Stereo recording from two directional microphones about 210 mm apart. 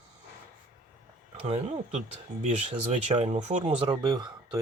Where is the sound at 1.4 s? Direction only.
25° right (ahead or behind).